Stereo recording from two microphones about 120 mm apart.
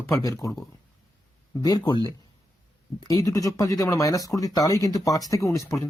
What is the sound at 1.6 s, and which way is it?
Speech, 35° left (ahead or behind).